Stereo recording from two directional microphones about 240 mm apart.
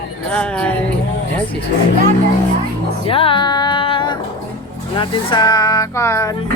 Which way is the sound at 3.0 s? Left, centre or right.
Left.